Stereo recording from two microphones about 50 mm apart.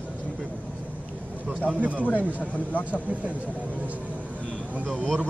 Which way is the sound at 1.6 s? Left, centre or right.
Right.